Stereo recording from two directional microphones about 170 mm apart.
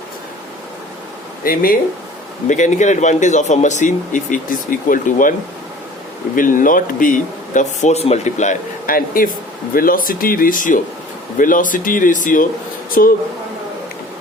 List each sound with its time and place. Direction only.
1.5 s speech: 55° left (ahead or behind)
2.5 s speech: 45° left (ahead or behind)
6.3 s speech: 50° left (ahead or behind)